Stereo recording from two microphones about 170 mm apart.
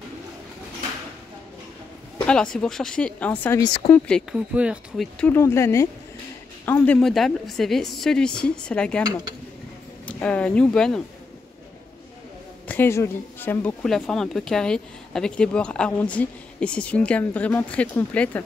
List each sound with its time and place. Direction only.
2.2 s a woman's voice: 5° left (ahead or behind); by 3.9 s 25° left (ahead or behind)
4.1 s a woman's voice: 5° right (ahead or behind)
5.3 s a woman's voice: 15° left (ahead or behind)
10.0 s speech: 5° left (ahead or behind)
12.6 s speech: 10° left (ahead or behind)